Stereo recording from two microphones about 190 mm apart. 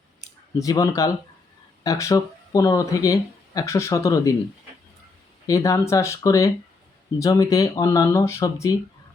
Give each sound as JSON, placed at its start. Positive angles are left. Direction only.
{"t": 0.2, "sound": "a sound", "side_deg": 20}
{"t": 1.8, "sound": "speech", "side_deg": 15}
{"t": 5.5, "sound": "speech", "side_deg": 15}